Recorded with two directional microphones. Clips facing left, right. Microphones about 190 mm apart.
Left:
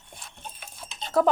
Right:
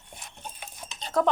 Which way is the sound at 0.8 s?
15° right (ahead or behind).